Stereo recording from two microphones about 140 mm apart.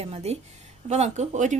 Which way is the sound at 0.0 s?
50° right (ahead or behind).